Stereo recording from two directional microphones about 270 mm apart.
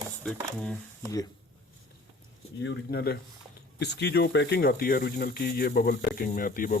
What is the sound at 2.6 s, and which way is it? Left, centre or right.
Speech, left.